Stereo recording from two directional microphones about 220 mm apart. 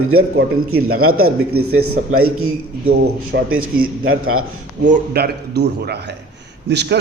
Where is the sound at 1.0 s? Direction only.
75° right (ahead or behind).